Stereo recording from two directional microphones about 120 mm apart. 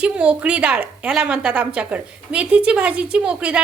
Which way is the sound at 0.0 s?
10° right (ahead or behind).